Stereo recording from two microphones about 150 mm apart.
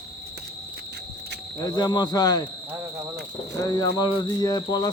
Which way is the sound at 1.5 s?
25° left (ahead or behind).